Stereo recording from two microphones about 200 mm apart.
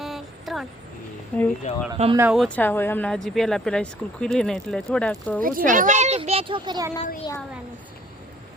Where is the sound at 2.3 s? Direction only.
5° left (ahead or behind).